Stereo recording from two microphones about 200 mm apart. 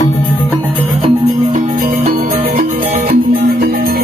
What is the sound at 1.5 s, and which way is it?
Music, 35° right (ahead or behind).